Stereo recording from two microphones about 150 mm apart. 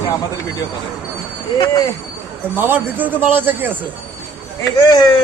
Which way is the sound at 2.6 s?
15° right (ahead or behind).